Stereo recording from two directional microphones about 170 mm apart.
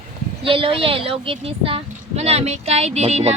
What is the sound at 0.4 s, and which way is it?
Speech, 30° right (ahead or behind).